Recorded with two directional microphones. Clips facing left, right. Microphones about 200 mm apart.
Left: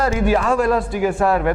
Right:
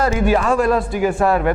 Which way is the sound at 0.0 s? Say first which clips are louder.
Right 1 dB; 10° right (ahead or behind).